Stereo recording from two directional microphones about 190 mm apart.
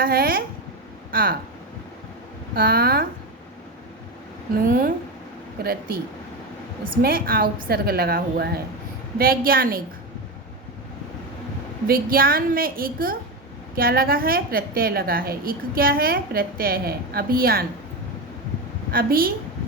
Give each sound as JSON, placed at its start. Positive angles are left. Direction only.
{"t": 0.0, "sound": "a woman's voice", "side_deg": -55}
{"t": 2.6, "sound": "a woman's voice", "side_deg": -55}
{"t": 4.6, "sound": "a woman's voice", "side_deg": -50}
{"t": 7.0, "sound": "a woman's voice", "side_deg": -50}
{"t": 11.9, "sound": "a woman's voice", "side_deg": -50}
{"t": 18.9, "sound": "a woman's voice", "side_deg": -50}